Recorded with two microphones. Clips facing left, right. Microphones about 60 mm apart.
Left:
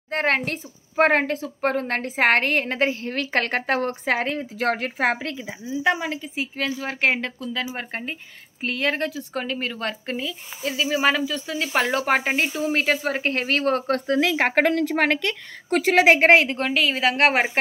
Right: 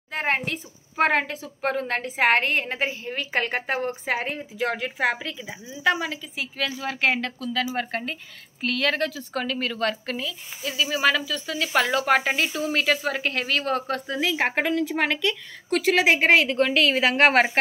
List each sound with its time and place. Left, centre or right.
0.1 s a woman's voice: left
5.5 s speech: left
6.3 s speech: left
10.6 s a woman's voice: left
16.3 s speech: left
16.5 s a woman's voice: centre